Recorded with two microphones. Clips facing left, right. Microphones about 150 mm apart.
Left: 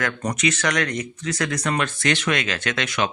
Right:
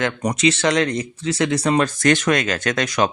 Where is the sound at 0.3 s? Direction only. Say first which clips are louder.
Right 6 dB; 30° right (ahead or behind).